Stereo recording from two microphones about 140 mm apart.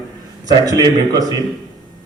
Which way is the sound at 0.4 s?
25° right (ahead or behind).